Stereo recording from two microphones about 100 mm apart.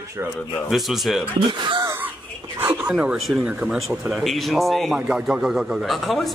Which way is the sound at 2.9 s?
5° right (ahead or behind).